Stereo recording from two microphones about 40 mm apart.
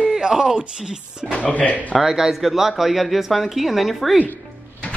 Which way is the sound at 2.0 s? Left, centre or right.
Centre.